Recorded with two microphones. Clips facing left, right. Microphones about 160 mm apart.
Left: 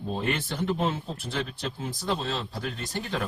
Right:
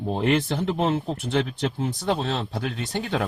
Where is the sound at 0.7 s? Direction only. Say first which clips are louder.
Right 5 dB; 65° right (ahead or behind).